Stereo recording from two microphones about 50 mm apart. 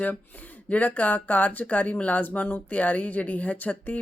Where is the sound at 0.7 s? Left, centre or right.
Left.